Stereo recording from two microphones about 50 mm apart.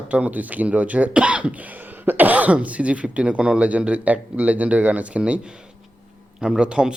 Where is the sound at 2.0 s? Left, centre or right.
Right.